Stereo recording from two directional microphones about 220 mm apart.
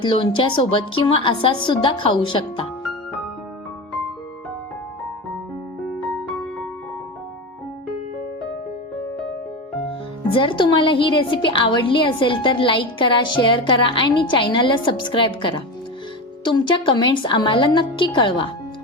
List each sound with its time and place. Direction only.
0.0 s a woman's voice: 20° left (ahead or behind)
6.3 s music: centre (ahead or behind)
10.3 s a woman's voice: 20° left (ahead or behind)